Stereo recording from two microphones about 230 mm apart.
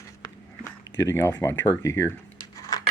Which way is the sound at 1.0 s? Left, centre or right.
Centre.